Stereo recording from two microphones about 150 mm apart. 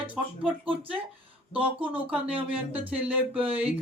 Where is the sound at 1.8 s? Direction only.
10° right (ahead or behind).